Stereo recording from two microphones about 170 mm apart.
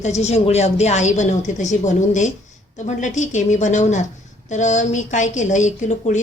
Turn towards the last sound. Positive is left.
turn(degrees=45)  # may be behind; listen again after turning